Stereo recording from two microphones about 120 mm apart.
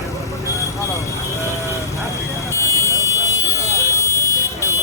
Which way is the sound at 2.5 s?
25° left (ahead or behind).